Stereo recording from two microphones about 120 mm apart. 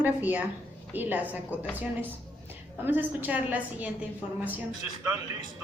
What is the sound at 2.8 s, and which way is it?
A man's voice, 15° right (ahead or behind).